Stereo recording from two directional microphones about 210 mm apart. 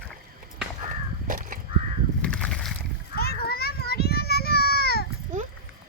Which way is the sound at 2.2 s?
5° left (ahead or behind).